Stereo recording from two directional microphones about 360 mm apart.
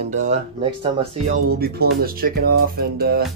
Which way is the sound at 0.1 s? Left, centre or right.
Centre.